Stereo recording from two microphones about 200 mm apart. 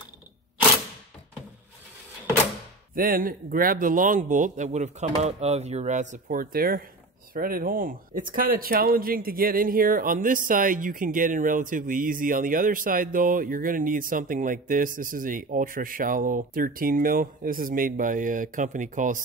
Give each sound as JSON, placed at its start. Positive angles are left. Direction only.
{"t": 2.9, "sound": "speech", "side_deg": -45}